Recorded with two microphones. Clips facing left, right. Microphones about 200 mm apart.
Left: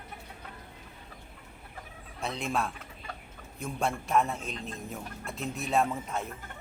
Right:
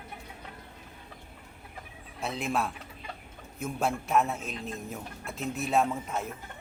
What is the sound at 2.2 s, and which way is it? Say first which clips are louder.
A man's voice: right 1 dB; centre (ahead or behind).